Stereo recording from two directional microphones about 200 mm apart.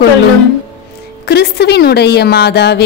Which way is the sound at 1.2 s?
55° left (ahead or behind).